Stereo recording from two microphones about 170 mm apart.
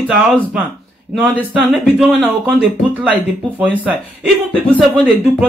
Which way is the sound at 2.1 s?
5° right (ahead or behind).